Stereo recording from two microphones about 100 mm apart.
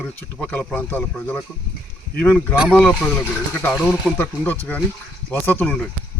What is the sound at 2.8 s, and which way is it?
Speech, 5° left (ahead or behind).